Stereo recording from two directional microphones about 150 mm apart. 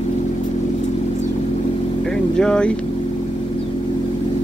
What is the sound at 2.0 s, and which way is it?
Vehicle, 5° left (ahead or behind).